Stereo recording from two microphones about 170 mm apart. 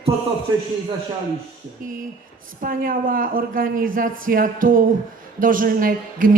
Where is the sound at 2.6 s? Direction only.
55° right (ahead or behind).